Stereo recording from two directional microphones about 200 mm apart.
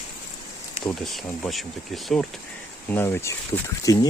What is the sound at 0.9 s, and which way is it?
Speech, centre (ahead or behind).